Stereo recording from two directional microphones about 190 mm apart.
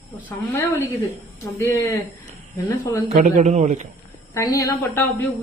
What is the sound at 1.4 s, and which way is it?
Speech, 15° left (ahead or behind).